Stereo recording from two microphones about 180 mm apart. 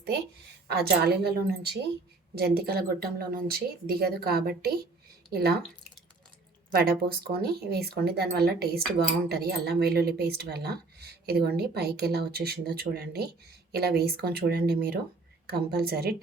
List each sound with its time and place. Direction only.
0.7 s speech: 65° right (ahead or behind)
6.7 s speech: 60° right (ahead or behind)